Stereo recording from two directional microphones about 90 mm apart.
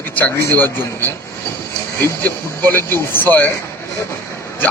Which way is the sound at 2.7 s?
25° left (ahead or behind).